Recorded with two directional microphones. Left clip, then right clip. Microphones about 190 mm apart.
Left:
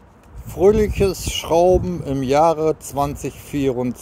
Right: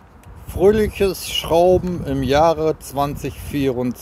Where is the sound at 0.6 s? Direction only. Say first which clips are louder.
Even; 5° left (ahead or behind).